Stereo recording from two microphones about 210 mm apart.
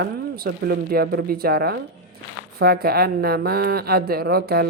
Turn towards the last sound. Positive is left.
turn(degrees=-50)  # may be behind; listen again after turning